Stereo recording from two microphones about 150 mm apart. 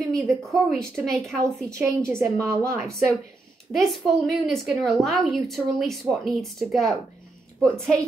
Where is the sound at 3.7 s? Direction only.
Centre (ahead or behind).